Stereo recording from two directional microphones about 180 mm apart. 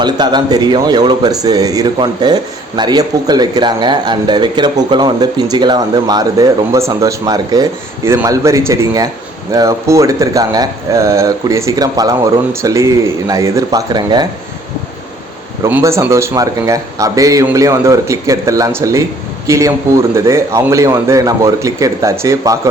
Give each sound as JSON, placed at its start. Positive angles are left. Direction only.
{"t": 0.0, "sound": "a man's voice", "side_deg": -25}
{"t": 15.6, "sound": "speech", "side_deg": -15}